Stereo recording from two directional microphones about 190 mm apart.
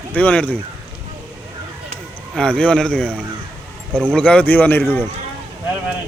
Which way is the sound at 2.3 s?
5° left (ahead or behind).